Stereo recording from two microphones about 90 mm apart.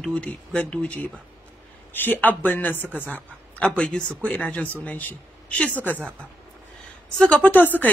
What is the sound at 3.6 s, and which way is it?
Speech, 10° left (ahead or behind).